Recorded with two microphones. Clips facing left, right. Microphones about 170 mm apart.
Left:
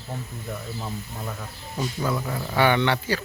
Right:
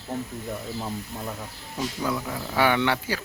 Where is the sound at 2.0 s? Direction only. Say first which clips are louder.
Left 2 dB; 5° right (ahead or behind).